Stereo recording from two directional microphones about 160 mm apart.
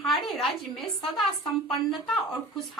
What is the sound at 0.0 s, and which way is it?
A woman's voice, centre (ahead or behind).